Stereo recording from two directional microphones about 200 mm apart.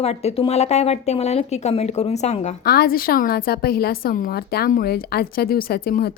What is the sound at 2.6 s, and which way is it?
A woman's voice, 50° left (ahead or behind).